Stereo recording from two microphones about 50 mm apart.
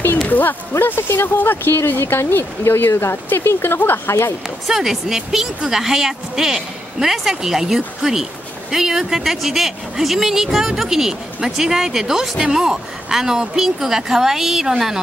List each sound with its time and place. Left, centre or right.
0.3 s speech: left
3.3 s speech: left
4.6 s a woman's voice: centre